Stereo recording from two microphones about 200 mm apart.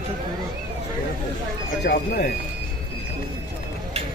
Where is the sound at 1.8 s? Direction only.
55° left (ahead or behind).